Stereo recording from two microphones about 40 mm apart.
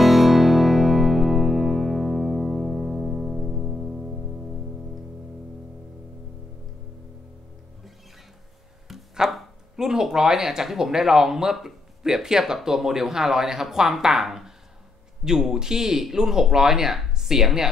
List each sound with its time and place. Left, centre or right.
0.0 s music: centre
9.2 s speech: centre